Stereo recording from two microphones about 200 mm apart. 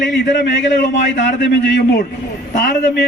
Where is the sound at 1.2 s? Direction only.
60° left (ahead or behind).